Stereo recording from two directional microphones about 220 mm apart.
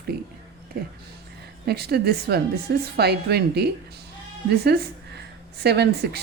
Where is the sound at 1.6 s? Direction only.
45° right (ahead or behind).